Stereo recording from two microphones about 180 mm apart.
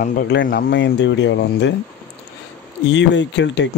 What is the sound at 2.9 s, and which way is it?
Speech, 80° left.